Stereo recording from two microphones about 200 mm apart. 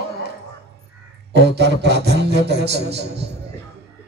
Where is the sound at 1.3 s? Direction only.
55° right (ahead or behind).